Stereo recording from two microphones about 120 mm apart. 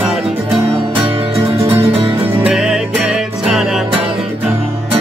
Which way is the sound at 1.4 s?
50° right (ahead or behind).